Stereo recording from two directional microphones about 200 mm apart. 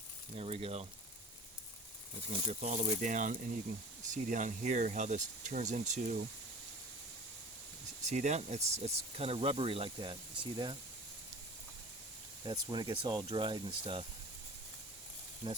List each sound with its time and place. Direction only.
0.3 s speech: 30° right (ahead or behind)
2.4 s speech: 35° right (ahead or behind)
8.0 s speech: 35° right (ahead or behind)
12.5 s speech: 20° right (ahead or behind)